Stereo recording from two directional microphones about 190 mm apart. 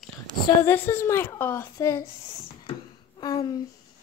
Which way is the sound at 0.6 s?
10° left (ahead or behind).